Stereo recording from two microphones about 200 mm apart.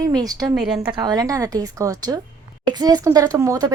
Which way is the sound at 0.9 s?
20° right (ahead or behind).